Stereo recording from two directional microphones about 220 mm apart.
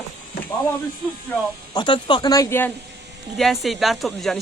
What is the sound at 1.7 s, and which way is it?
Speech, 20° left (ahead or behind).